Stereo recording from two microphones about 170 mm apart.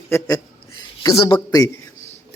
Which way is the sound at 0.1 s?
20° left (ahead or behind).